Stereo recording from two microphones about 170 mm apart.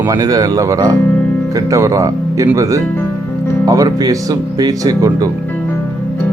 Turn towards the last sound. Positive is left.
turn(degrees=-20)  # may be behind; listen again after turning